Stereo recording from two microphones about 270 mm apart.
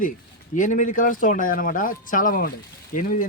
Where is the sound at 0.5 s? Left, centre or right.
Left.